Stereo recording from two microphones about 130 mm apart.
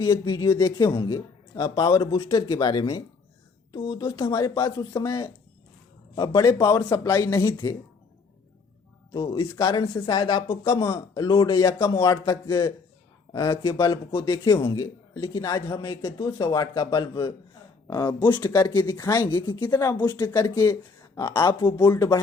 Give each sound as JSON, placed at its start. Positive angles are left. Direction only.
{"t": 0.0, "sound": "speech", "side_deg": 30}
{"t": 9.1, "sound": "speech", "side_deg": 35}